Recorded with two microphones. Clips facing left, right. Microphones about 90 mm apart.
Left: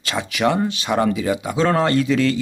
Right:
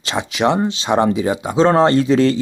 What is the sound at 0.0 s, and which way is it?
Speech, 25° right (ahead or behind).